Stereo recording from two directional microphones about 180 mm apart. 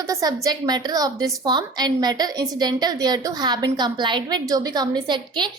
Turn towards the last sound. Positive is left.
turn(degrees=-25)  # may be behind; listen again after turning